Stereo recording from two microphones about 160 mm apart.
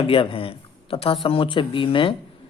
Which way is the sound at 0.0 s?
35° left (ahead or behind).